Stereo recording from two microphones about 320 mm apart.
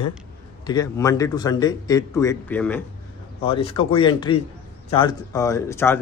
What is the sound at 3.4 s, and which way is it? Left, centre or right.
Speech, centre.